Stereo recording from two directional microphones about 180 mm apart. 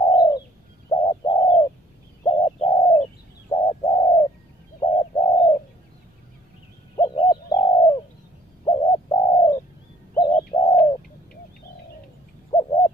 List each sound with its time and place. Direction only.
0.0 s bird: 25° left (ahead or behind)
7.0 s bird: 20° left (ahead or behind)
10.1 s bird: 25° left (ahead or behind)
10.6 s bird: 40° left (ahead or behind)
12.4 s bird: 30° left (ahead or behind)